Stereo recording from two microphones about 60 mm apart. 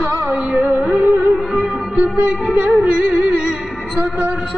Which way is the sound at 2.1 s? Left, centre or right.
Right.